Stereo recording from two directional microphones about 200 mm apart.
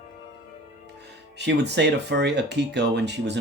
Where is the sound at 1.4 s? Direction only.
60° right (ahead or behind).